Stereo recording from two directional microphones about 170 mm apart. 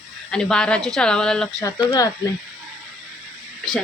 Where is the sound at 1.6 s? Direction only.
20° left (ahead or behind).